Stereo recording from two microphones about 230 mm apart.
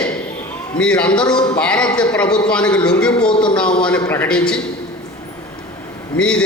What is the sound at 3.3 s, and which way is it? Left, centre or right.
Speech, left.